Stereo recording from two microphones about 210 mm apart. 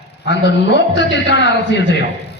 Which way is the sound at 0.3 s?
55° left (ahead or behind).